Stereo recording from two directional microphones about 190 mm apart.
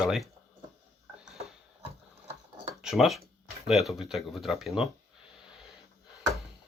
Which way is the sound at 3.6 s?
Centre (ahead or behind).